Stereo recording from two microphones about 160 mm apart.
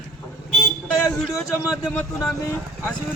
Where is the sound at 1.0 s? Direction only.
20° left (ahead or behind).